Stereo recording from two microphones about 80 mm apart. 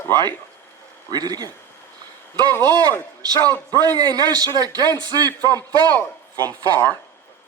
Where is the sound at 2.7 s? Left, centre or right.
Right.